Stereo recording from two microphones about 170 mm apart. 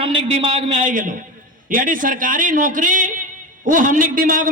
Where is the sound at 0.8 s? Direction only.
50° right (ahead or behind).